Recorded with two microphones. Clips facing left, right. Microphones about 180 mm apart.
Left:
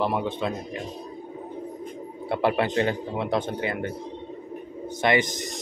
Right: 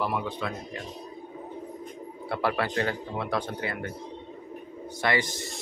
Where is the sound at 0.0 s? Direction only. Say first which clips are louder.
Left 4 dB; 25° left (ahead or behind).